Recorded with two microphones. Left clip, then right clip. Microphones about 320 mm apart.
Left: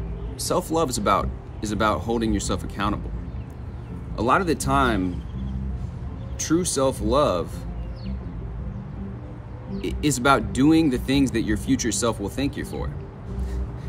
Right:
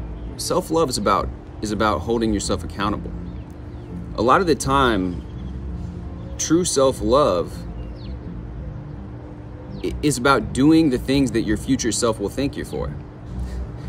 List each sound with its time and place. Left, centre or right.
0.4 s speech: centre
4.2 s speech: centre
6.3 s speech: centre
9.8 s speech: centre